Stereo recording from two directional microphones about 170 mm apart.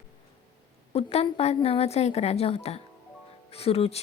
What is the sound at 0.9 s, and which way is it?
A woman's voice, 35° left (ahead or behind).